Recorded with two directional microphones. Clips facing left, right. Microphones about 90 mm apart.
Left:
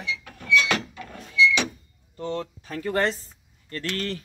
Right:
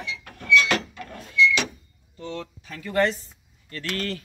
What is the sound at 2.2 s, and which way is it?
Speech, 40° left (ahead or behind).